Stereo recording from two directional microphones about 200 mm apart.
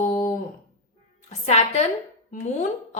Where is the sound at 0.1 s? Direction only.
40° left (ahead or behind).